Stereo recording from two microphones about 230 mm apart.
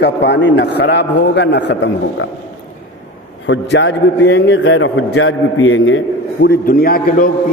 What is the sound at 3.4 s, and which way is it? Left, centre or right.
A man's voice, left.